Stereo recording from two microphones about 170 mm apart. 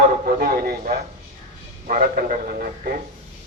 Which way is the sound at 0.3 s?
60° right (ahead or behind).